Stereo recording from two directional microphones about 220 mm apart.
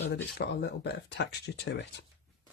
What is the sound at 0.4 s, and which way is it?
Speech, 45° left (ahead or behind).